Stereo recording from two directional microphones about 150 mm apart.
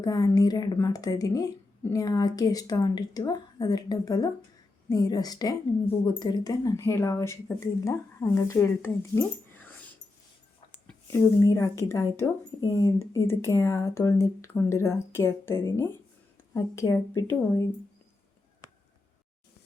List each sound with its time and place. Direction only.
0.0 s a woman's voice: 25° left (ahead or behind)
11.1 s a woman's voice: 20° left (ahead or behind)